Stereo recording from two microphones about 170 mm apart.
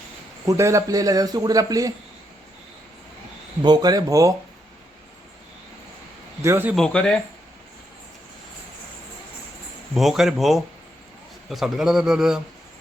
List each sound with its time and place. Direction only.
0.4 s a man's voice: 15° right (ahead or behind)
3.6 s a man's voice: 25° right (ahead or behind)
6.4 s a man's voice: 15° right (ahead or behind)
6.7 s a man's voice: 5° left (ahead or behind)
9.9 s a man's voice: centre (ahead or behind)